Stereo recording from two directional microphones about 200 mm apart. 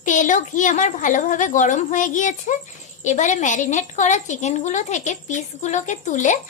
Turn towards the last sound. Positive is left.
turn(degrees=35)  # may be behind; listen again after turning